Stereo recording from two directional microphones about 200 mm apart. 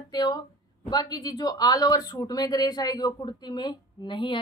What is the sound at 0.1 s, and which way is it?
Speech, 20° left (ahead or behind).